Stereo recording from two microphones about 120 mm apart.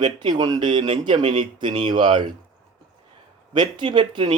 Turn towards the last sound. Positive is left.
turn(degrees=-40)  # may be behind; listen again after turning